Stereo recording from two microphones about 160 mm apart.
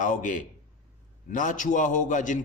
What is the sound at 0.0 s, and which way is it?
A man's voice, 50° left (ahead or behind).